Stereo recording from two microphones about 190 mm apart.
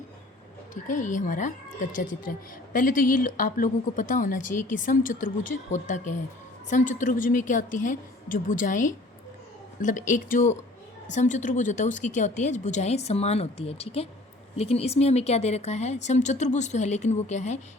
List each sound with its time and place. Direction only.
0.7 s speech: 45° left (ahead or behind)